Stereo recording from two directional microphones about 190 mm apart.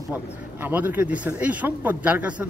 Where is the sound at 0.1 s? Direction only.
10° right (ahead or behind).